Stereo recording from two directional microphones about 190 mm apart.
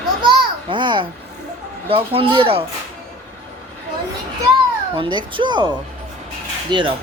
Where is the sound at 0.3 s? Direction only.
25° right (ahead or behind).